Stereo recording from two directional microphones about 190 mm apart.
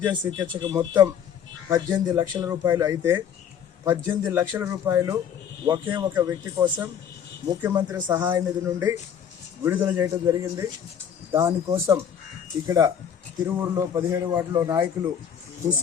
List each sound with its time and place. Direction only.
0.3 s speech: 85° right
0.5 s a man's voice: 20° right (ahead or behind)